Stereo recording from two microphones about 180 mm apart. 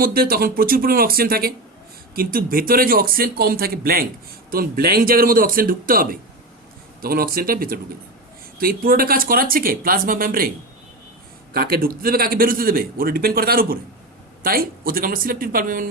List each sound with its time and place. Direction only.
0.0 s a man's voice: 55° right (ahead or behind)
11.5 s a man's voice: 55° right (ahead or behind)